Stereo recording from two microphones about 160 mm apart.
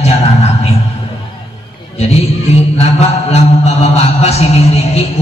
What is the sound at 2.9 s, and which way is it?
Mantra, 40° left (ahead or behind).